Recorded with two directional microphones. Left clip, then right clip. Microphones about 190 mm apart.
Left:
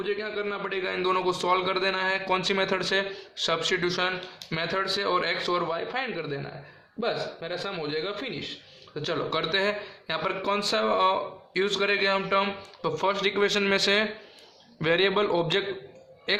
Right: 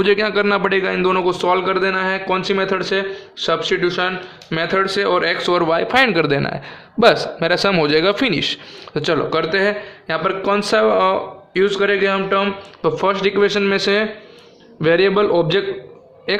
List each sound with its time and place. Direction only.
0.0 s speech: 45° right (ahead or behind); by 4.1 s 10° right (ahead or behind)
4.4 s a man's voice: 25° right (ahead or behind); by 8.5 s 50° right (ahead or behind)
9.0 s speech: 35° right (ahead or behind)
9.3 s a man's voice: 20° right (ahead or behind)